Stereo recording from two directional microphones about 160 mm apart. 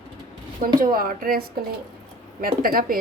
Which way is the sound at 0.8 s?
65° right (ahead or behind).